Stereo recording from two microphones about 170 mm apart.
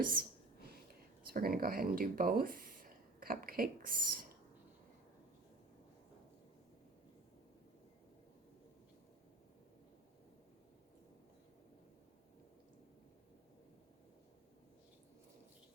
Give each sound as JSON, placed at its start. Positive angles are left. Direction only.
{"t": 0.0, "sound": "speech", "side_deg": -55}
{"t": 1.3, "sound": "speech", "side_deg": -60}